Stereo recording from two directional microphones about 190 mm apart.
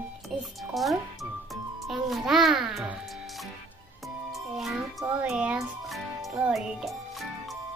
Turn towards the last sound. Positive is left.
turn(degrees=0)  # may be behind; listen again after turning